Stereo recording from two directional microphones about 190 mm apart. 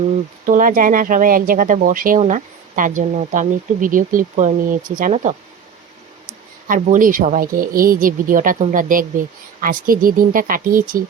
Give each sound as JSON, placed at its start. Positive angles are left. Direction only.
{"t": 0.4, "sound": "speech", "side_deg": -45}
{"t": 6.7, "sound": "speech", "side_deg": -40}